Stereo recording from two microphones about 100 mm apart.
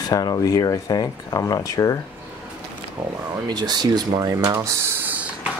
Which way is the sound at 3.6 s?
45° right (ahead or behind).